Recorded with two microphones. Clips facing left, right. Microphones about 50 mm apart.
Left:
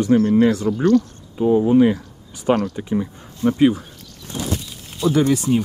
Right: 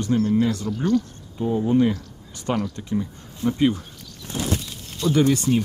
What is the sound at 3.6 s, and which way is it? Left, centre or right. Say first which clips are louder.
Speech: left 5 dB; centre.